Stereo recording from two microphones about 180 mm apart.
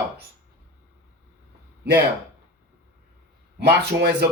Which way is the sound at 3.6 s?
65° right (ahead or behind).